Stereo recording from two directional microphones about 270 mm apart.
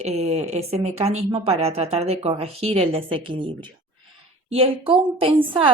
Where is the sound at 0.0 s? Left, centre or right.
Right.